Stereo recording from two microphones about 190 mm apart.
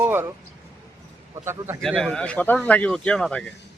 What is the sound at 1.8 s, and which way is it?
A man's voice, centre (ahead or behind).